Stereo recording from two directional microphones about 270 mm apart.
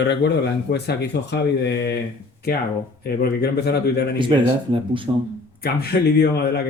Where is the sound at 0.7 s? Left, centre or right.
Left.